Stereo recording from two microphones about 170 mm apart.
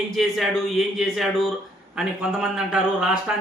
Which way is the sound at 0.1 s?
Centre (ahead or behind).